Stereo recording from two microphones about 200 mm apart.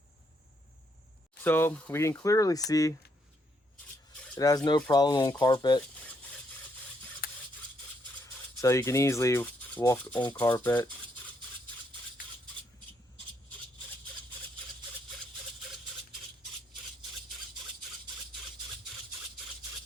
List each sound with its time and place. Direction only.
1.5 s speech: 10° left (ahead or behind)
4.4 s speech: 20° left (ahead or behind)
7.2 s stir: 50° left (ahead or behind)
8.2 s speech: 15° left (ahead or behind)